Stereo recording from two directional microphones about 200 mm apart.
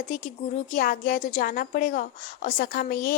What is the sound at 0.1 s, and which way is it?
A woman's voice, 40° left (ahead or behind).